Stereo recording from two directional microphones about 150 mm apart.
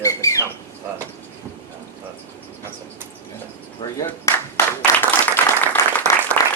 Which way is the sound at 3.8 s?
25° left (ahead or behind).